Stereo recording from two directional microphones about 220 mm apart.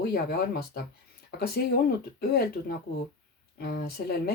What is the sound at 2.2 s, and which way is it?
Speech, 45° left (ahead or behind).